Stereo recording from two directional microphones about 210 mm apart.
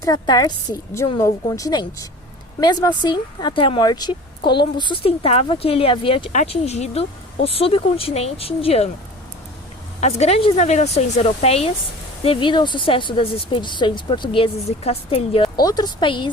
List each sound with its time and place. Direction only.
0.0 s a woman's voice: 20° left (ahead or behind)
10.0 s speech: 30° left (ahead or behind)